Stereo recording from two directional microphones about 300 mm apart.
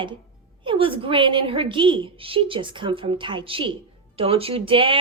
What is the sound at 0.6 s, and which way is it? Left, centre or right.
A woman's voice, centre.